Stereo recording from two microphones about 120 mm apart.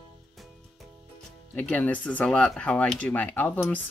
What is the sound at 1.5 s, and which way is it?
Speech, 15° left (ahead or behind).